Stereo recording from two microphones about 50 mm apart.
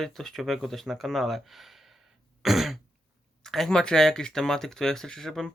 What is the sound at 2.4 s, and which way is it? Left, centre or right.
Throat clearing, centre.